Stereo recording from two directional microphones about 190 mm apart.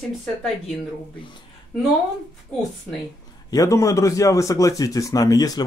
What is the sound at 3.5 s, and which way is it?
A man's voice, 20° left (ahead or behind).